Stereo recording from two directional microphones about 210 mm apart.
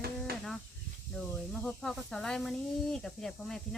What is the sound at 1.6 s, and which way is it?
Speech, 5° left (ahead or behind).